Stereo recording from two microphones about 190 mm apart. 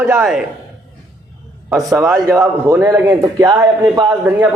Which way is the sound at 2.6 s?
15° right (ahead or behind).